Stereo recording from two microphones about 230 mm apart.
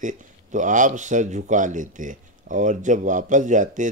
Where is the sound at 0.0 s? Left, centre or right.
Right.